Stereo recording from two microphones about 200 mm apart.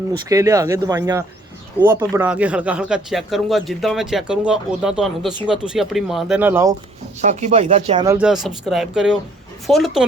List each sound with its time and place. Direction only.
0.3 s speech: 15° right (ahead or behind)
7.2 s speech: 35° right (ahead or behind)
8.0 s speech: 15° right (ahead or behind)
8.3 s speech: centre (ahead or behind)